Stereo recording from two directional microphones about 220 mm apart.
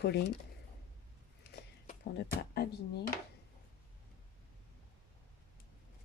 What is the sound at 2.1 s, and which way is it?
Speech, 45° left (ahead or behind).